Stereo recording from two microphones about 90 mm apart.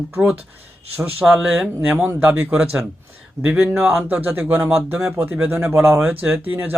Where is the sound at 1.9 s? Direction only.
20° right (ahead or behind).